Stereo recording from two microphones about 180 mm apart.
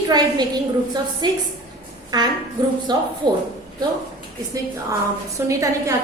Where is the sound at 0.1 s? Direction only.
20° right (ahead or behind).